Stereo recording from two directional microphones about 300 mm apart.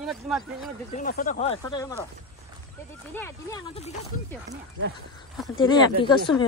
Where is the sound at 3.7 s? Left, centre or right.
Left.